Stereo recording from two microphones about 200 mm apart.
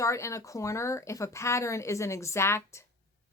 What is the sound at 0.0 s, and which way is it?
A woman's voice, 15° left (ahead or behind).